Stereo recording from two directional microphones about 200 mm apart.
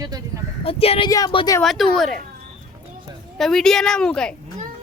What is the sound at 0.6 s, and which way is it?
Speech, 30° left (ahead or behind).